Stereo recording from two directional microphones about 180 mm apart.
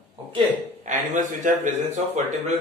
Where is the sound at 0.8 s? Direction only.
45° right (ahead or behind).